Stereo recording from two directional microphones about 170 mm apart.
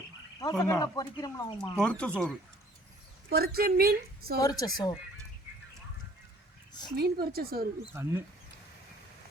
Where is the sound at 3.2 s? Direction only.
65° right (ahead or behind).